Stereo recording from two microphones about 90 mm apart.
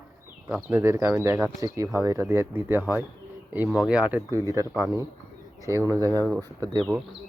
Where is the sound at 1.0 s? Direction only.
30° right (ahead or behind); by 4.2 s 15° right (ahead or behind).